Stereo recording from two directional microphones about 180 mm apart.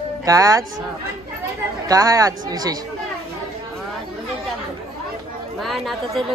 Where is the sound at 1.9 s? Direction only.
20° right (ahead or behind).